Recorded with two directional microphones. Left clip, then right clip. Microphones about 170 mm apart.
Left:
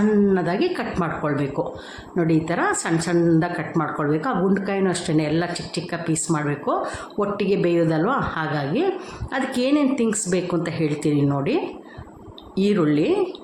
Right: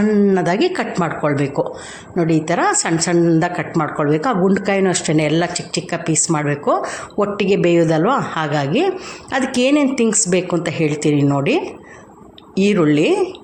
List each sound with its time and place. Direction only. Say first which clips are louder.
0.3 s speech: right 5 dB; 15° right (ahead or behind)